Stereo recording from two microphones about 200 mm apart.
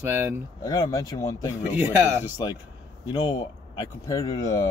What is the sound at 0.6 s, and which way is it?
Speech, 15° left (ahead or behind).